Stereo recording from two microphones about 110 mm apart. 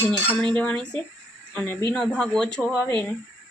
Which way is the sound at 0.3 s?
15° left (ahead or behind).